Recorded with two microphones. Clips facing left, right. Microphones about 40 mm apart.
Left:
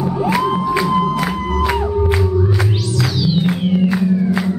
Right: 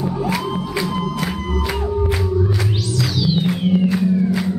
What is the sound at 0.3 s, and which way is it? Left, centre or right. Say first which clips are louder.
Music: left 6 dB; centre.